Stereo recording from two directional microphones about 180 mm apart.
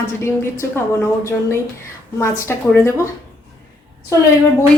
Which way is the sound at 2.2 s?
15° left (ahead or behind).